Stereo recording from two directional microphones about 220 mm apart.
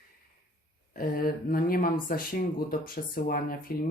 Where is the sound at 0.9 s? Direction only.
40° left (ahead or behind).